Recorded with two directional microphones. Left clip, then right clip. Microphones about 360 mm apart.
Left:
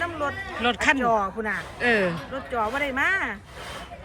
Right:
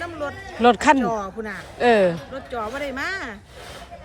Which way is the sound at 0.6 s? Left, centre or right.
Centre.